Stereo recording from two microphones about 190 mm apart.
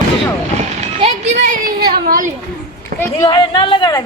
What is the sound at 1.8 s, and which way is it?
Speech, 50° right (ahead or behind).